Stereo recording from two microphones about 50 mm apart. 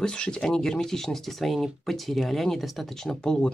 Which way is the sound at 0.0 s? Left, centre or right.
Centre.